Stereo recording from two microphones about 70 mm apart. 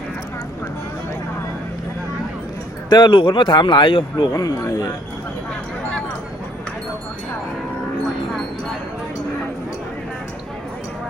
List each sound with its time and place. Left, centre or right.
2.9 s a man's voice: left
4.3 s speech: left